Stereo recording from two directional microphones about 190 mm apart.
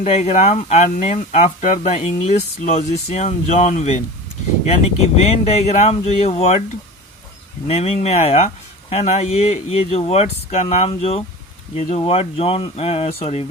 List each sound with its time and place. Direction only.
0.0 s speech: 35° left (ahead or behind)
5.1 s speech: 35° left (ahead or behind)
7.7 s speech: 35° left (ahead or behind)